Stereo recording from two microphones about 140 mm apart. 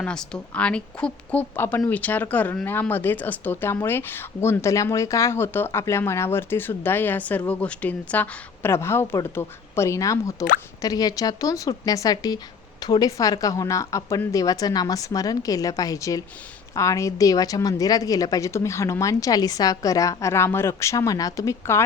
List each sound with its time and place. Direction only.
0.0 s a woman's voice: 5° left (ahead or behind); by 21.8 s 20° left (ahead or behind)